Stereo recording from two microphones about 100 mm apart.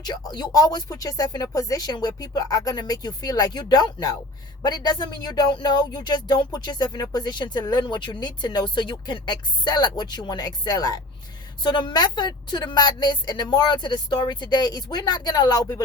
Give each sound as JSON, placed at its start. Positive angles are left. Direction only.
{"t": 0.0, "sound": "speech", "side_deg": 45}
{"t": 11.6, "sound": "speech", "side_deg": 50}